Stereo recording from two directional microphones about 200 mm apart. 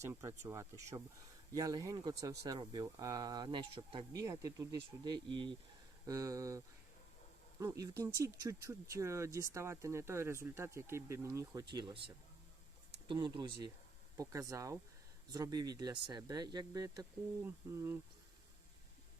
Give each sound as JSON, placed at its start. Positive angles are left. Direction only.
{"t": 0.0, "sound": "speech", "side_deg": -15}
{"t": 7.6, "sound": "speech", "side_deg": -15}